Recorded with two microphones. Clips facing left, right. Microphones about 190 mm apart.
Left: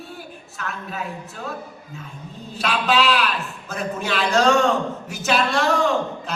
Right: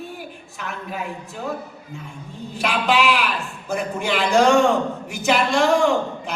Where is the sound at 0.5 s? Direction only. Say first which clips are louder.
Right 1 dB; 15° right (ahead or behind).